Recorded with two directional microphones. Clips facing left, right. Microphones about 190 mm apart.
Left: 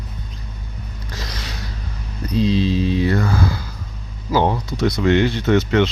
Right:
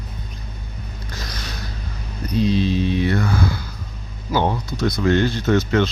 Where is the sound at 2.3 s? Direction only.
90° left.